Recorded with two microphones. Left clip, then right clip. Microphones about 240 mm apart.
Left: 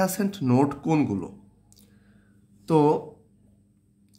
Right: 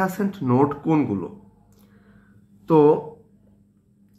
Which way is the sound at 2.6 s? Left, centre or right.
Left.